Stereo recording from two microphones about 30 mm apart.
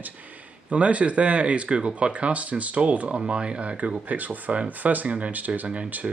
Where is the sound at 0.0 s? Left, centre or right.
Right.